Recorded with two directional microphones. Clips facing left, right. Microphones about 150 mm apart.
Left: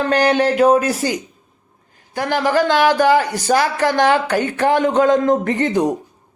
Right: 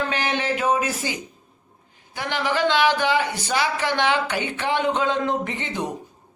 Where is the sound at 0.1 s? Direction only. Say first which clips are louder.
Left 10 dB; 45° left (ahead or behind).